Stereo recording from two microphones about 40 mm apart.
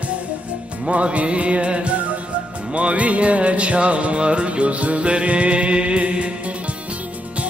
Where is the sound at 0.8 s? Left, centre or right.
Right.